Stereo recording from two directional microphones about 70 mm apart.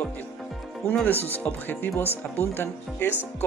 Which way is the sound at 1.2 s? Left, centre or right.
Left.